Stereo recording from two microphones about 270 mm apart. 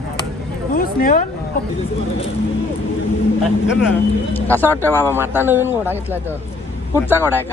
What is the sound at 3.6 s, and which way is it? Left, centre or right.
Speech, centre.